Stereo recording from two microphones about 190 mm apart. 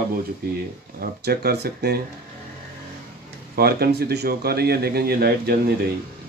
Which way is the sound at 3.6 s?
55° right (ahead or behind).